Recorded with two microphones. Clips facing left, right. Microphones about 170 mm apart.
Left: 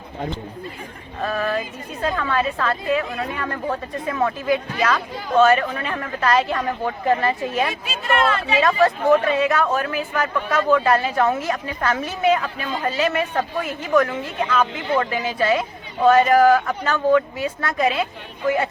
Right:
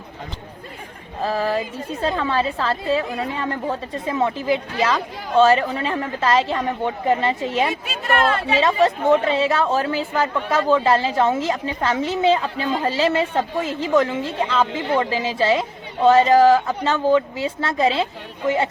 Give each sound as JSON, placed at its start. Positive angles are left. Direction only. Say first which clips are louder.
{"t": 1.2, "sound": "a woman's voice", "louder": "right 2 dB", "side_deg": -30}